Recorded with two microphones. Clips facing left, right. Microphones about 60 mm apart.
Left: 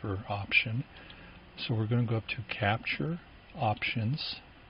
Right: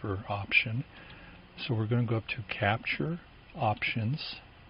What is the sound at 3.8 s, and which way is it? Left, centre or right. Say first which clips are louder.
Speech: right 1 dB; right.